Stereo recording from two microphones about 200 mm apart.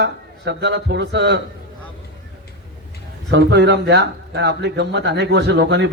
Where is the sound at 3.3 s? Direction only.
60° right (ahead or behind).